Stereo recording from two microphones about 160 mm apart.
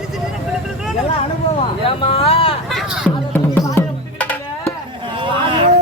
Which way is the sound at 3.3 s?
15° left (ahead or behind).